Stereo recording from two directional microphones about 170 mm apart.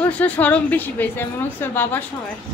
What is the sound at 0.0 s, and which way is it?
A woman's voice, 10° left (ahead or behind).